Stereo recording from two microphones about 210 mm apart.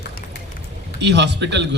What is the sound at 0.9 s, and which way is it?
Speech, 55° right (ahead or behind).